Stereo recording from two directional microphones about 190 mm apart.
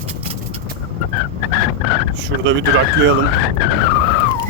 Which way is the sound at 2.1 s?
65° right (ahead or behind).